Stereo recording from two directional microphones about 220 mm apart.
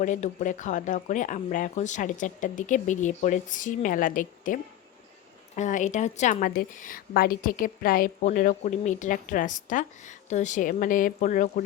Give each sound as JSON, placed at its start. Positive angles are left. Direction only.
{"t": 0.0, "sound": "a woman's voice", "side_deg": 35}